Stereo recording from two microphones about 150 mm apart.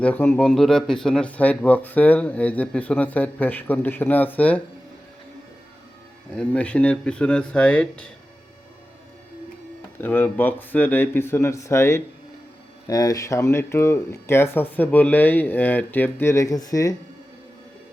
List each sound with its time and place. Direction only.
0.0 s speech: 10° left (ahead or behind)
6.3 s speech: 10° left (ahead or behind)
10.0 s speech: 15° left (ahead or behind)